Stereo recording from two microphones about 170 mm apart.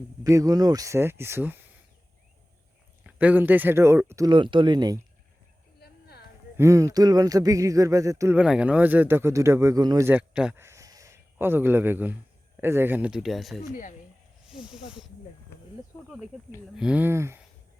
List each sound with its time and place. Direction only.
0.3 s speech: 20° right (ahead or behind)
3.0 s speech: 10° right (ahead or behind)
4.3 s speech: 30° right (ahead or behind)
5.8 s a sound: 70° left (ahead or behind)
6.6 s speech: 20° right (ahead or behind)
10.1 s speech: 5° right (ahead or behind)
10.6 s a sound: 20° right (ahead or behind)
12.5 s speech: 15° right (ahead or behind)
16.7 s speech: 5° right (ahead or behind)